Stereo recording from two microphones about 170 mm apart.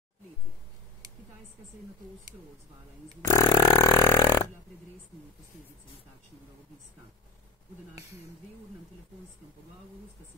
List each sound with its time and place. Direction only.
3.3 s burping: 20° left (ahead or behind)